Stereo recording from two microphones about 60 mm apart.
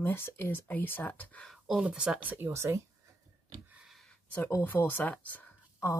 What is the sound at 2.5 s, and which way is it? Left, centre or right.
Speech, right.